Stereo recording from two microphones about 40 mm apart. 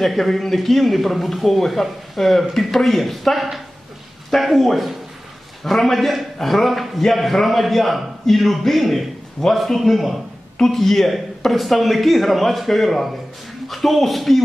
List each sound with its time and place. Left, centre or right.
0.0 s speech: centre